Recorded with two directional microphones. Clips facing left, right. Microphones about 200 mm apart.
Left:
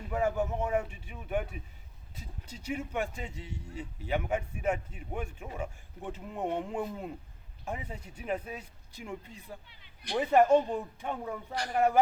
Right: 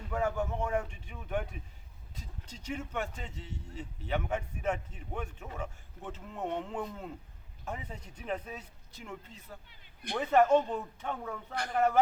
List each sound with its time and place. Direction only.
0.0 s a man's voice: 10° left (ahead or behind)
9.6 s a sound: 50° right (ahead or behind)
10.2 s a man's voice: 10° left (ahead or behind)